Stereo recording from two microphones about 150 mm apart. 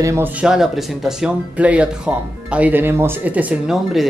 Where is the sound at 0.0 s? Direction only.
20° right (ahead or behind).